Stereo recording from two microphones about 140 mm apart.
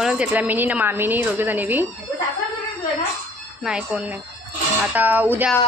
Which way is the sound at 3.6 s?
5° right (ahead or behind).